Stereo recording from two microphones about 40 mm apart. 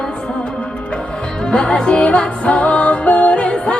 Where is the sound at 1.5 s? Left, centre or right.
Left.